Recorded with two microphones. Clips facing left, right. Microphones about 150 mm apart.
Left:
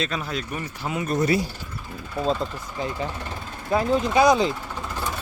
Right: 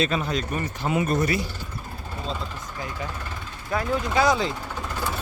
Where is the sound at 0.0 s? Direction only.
Centre (ahead or behind).